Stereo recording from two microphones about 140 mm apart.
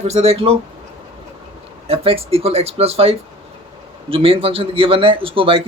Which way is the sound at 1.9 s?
45° right (ahead or behind).